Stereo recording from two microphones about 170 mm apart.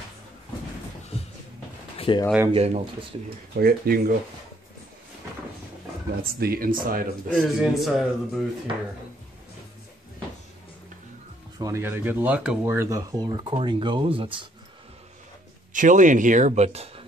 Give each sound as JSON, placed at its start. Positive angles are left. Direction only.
{"t": 2.0, "sound": "a sound", "side_deg": 30}
{"t": 2.5, "sound": "speech", "side_deg": -35}
{"t": 3.5, "sound": "speech", "side_deg": -65}
{"t": 6.4, "sound": "speech", "side_deg": -60}
{"t": 7.3, "sound": "a man's voice", "side_deg": -5}
{"t": 11.5, "sound": "speech", "side_deg": -20}
{"t": 15.7, "sound": "speech", "side_deg": -50}